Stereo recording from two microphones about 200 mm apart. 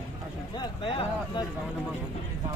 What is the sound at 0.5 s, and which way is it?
Speech, 25° left (ahead or behind).